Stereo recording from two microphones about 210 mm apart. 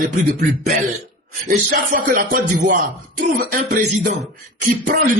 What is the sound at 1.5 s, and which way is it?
A man's voice, 40° right (ahead or behind).